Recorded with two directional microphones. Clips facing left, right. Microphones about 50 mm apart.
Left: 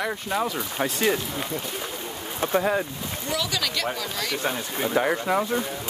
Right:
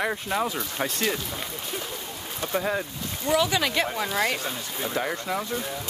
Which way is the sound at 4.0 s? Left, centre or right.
Right.